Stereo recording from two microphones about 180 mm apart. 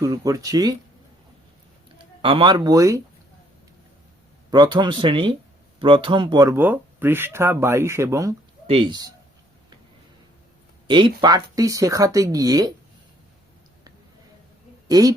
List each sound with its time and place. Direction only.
0.0 s speech: 20° right (ahead or behind)
2.2 s speech: 25° right (ahead or behind)
4.5 s speech: 25° right (ahead or behind)
8.6 s speech: 30° right (ahead or behind)
10.8 s speech: 25° right (ahead or behind)
14.8 s a woman's voice: 20° right (ahead or behind)